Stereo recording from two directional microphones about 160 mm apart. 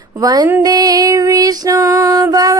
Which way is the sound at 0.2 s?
25° right (ahead or behind).